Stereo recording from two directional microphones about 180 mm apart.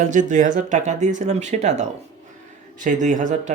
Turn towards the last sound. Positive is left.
turn(degrees=-45)  # may be behind; listen again after turning